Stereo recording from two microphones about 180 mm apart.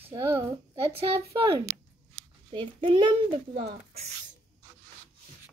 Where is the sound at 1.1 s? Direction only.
25° right (ahead or behind).